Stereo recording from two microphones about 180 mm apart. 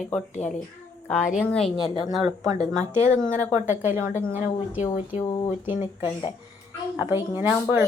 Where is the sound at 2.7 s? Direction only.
15° right (ahead or behind).